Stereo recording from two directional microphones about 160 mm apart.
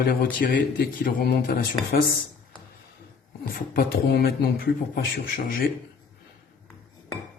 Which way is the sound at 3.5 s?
70° left (ahead or behind).